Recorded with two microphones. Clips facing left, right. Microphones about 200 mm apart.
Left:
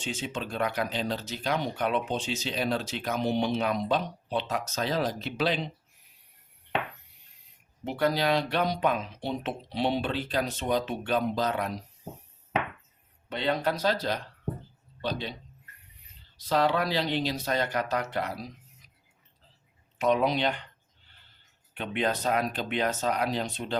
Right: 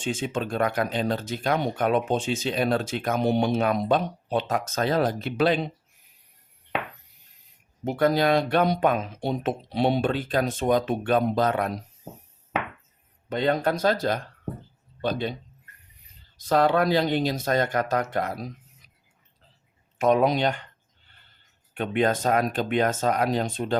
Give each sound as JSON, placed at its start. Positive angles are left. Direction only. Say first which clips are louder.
{"t": 0.0, "sound": "speech", "louder": "right 6 dB", "side_deg": -50}
{"t": 7.9, "sound": "speech", "louder": "right 5 dB", "side_deg": -50}
{"t": 13.3, "sound": "speech", "louder": "right 5 dB", "side_deg": -45}
{"t": 16.4, "sound": "speech", "louder": "right 5 dB", "side_deg": -50}
{"t": 20.0, "sound": "speech", "louder": "right 4 dB", "side_deg": -50}
{"t": 21.8, "sound": "speech", "louder": "right 6 dB", "side_deg": -50}